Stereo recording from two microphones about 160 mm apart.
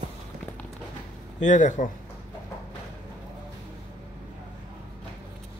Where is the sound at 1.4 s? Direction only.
50° left (ahead or behind).